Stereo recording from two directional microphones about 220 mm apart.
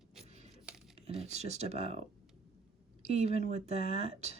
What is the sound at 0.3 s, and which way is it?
Tearing, 30° right (ahead or behind).